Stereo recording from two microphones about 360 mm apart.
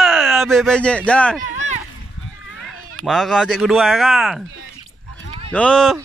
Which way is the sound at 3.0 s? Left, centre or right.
Centre.